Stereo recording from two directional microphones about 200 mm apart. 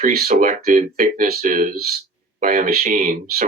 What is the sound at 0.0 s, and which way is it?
Speech, 50° right (ahead or behind).